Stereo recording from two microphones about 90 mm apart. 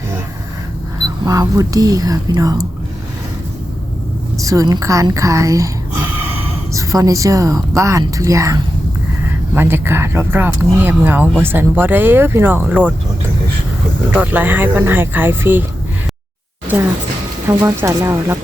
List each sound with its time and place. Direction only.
1.2 s a woman's voice: 40° right (ahead or behind)
4.4 s a woman's voice: 40° right (ahead or behind)
6.7 s a woman's voice: 40° right (ahead or behind)
9.6 s speech: 25° right (ahead or behind)
14.1 s speech: 20° right (ahead or behind)
17.5 s a woman's voice: 40° right (ahead or behind)
17.7 s speech: 30° right (ahead or behind)